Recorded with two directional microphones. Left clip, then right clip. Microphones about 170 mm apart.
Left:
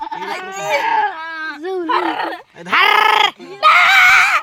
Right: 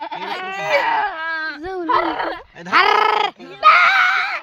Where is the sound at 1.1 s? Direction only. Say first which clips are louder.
Right 1 dB; 25° right (ahead or behind).